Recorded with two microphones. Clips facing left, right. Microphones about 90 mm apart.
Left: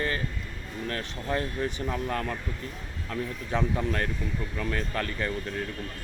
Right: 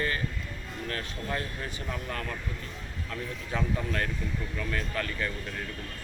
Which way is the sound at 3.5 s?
25° left (ahead or behind).